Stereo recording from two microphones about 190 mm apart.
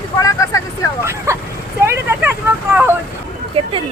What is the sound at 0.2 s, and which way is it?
Vehicle, 15° left (ahead or behind).